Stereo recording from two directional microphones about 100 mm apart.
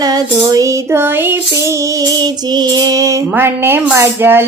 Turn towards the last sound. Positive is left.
turn(degrees=-20)  # may be behind; listen again after turning